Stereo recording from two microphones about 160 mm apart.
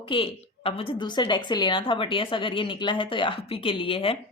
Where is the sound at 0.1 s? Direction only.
35° left (ahead or behind).